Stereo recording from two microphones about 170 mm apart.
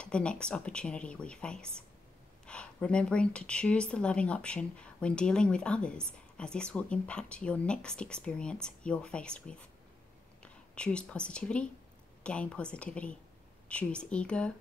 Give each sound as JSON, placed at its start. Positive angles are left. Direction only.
{"t": 0.0, "sound": "a woman's voice", "side_deg": 5}